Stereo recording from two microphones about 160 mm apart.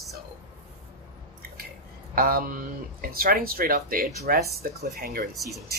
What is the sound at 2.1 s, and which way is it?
Speech, 65° right (ahead or behind).